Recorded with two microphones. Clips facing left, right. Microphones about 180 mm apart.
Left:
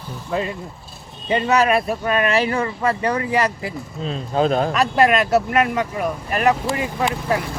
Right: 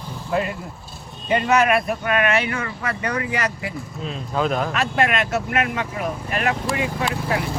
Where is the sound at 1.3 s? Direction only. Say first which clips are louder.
Left 1 dB; 30° left (ahead or behind).